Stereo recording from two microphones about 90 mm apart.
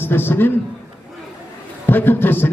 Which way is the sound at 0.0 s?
25° left (ahead or behind).